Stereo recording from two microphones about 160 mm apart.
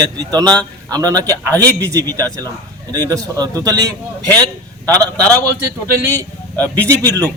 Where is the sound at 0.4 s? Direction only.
5° left (ahead or behind).